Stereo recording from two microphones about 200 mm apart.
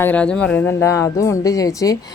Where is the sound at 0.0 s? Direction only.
5° left (ahead or behind).